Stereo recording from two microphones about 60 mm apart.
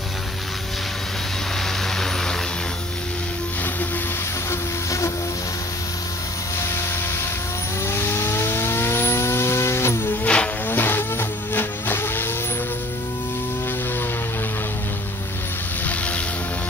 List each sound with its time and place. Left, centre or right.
7.8 s vehicle: left
10.2 s music: centre
10.7 s vehicle: left